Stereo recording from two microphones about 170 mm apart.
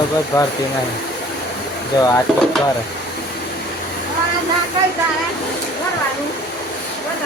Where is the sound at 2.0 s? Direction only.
20° left (ahead or behind).